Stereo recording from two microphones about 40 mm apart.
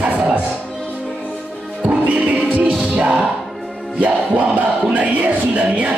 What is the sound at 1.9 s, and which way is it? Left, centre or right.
Music, right.